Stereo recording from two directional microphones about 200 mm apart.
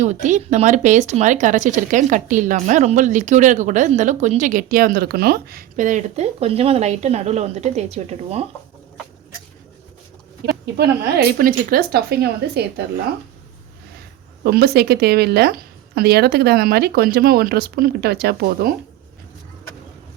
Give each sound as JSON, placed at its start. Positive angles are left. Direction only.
{"t": 0.0, "sound": "speech", "side_deg": -35}
{"t": 10.4, "sound": "a woman's voice", "side_deg": -55}
{"t": 14.4, "sound": "a woman's voice", "side_deg": -50}